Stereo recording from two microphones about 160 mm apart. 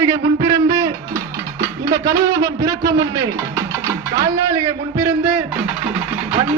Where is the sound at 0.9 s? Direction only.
20° right (ahead or behind).